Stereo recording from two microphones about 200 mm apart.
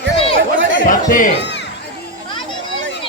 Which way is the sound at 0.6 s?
70° right (ahead or behind).